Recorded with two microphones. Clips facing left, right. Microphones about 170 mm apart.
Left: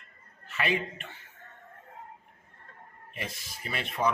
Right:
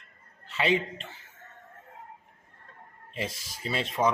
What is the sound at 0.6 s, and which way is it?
Speech, 25° right (ahead or behind).